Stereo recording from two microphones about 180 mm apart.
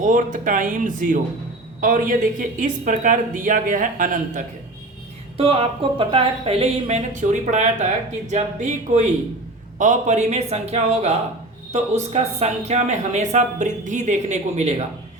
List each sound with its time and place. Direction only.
0.0 s a woman's voice: 45° right (ahead or behind)
5.4 s speech: 30° right (ahead or behind)